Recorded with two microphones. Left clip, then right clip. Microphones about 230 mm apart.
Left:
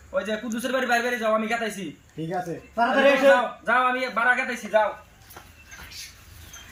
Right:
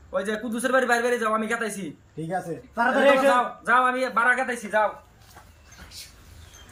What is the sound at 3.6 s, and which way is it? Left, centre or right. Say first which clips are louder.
A man's voice: right 1 dB; centre.